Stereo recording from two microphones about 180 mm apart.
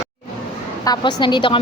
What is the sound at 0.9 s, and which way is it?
Speech, 25° left (ahead or behind).